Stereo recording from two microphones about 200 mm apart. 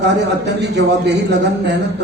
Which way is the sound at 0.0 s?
60° right (ahead or behind).